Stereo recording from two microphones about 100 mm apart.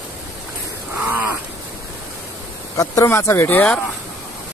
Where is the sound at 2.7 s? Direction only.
35° left (ahead or behind); by 3.7 s 20° left (ahead or behind).